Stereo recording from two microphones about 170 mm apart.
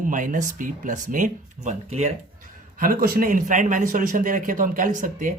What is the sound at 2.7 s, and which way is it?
A man's voice, 55° right (ahead or behind).